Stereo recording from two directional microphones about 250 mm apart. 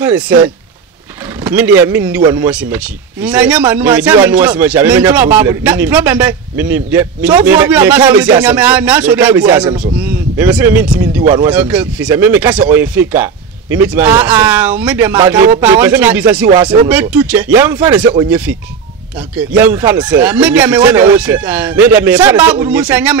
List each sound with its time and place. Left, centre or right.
0.0 s speech: centre
1.4 s vehicle: centre
1.8 s speech: centre